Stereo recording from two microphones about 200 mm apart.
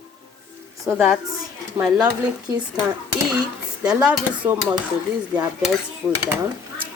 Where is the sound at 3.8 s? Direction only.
5° right (ahead or behind).